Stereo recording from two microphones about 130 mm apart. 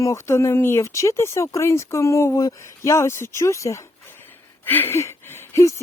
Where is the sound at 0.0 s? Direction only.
20° left (ahead or behind).